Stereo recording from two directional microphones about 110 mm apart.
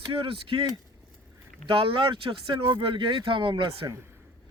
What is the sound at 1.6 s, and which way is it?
Speech, 55° right (ahead or behind).